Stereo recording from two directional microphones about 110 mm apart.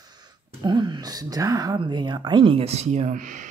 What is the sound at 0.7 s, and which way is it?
Speech, 40° right (ahead or behind).